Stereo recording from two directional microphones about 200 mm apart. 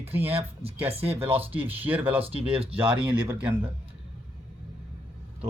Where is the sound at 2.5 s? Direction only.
30° right (ahead or behind).